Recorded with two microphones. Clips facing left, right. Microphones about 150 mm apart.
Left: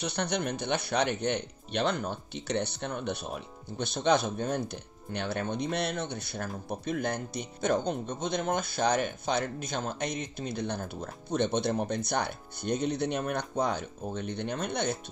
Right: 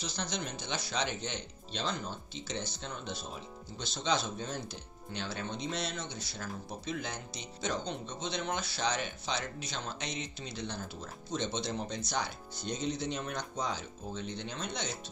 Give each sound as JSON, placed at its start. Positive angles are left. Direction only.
{"t": 0.0, "sound": "speech", "side_deg": 65}